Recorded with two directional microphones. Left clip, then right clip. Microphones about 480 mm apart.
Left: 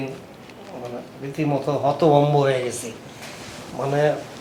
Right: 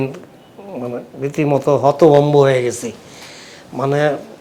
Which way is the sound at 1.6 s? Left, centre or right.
Right.